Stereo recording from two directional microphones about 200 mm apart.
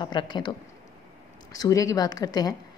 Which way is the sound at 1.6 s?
15° left (ahead or behind).